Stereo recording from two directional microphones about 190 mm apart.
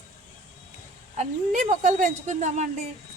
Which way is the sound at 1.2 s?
40° right (ahead or behind).